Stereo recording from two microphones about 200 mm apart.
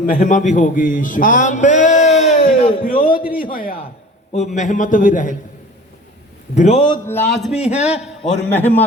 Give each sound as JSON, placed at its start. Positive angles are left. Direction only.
{"t": 0.0, "sound": "a man's voice", "side_deg": 45}
{"t": 6.5, "sound": "a man's voice", "side_deg": 35}
{"t": 7.1, "sound": "a man's voice", "side_deg": 5}
{"t": 7.5, "sound": "a man's voice", "side_deg": 35}
{"t": 7.8, "sound": "a man's voice", "side_deg": -5}
{"t": 8.5, "sound": "a man's voice", "side_deg": 10}